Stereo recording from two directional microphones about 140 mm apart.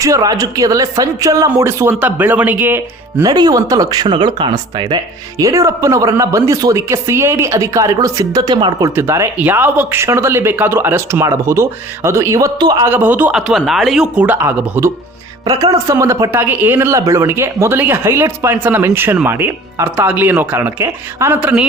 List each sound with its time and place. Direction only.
0.0 s speech: 25° right (ahead or behind)
3.2 s speech: 30° right (ahead or behind)
12.8 s speech: 15° right (ahead or behind)
13.5 s speech: centre (ahead or behind)